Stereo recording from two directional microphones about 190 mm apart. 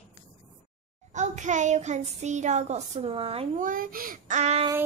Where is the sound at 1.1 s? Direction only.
40° right (ahead or behind).